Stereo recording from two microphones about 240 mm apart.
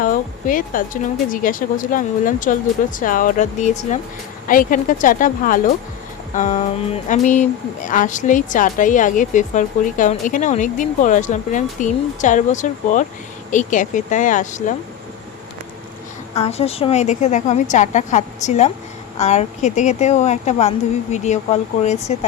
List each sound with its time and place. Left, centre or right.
0.0 s a sound: left
1.3 s a woman's voice: left
16.3 s speech: left